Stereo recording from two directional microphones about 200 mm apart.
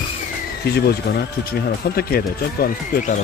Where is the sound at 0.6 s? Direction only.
50° left (ahead or behind).